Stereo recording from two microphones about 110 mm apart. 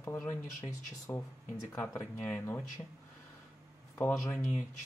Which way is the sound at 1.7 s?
20° left (ahead or behind).